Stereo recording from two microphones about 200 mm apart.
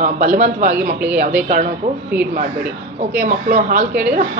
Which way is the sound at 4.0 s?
50° right (ahead or behind).